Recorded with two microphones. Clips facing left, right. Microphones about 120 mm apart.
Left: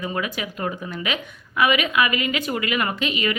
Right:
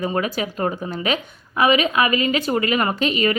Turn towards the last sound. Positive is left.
turn(degrees=-35)  # may be behind; listen again after turning